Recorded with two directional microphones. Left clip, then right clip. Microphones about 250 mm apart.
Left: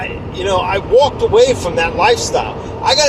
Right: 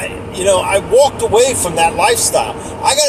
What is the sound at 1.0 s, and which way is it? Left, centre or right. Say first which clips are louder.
Speech: left 1 dB; centre.